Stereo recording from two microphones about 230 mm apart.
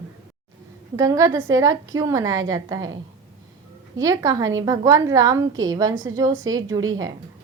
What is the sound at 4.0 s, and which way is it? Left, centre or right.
A woman's voice, centre.